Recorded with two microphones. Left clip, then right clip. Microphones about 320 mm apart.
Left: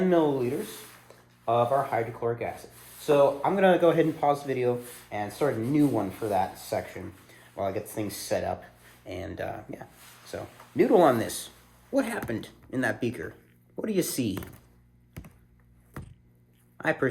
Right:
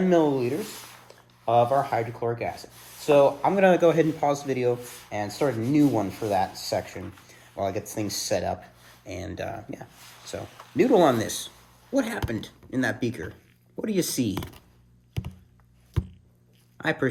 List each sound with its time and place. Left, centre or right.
0.0 s speech: right
16.7 s speech: right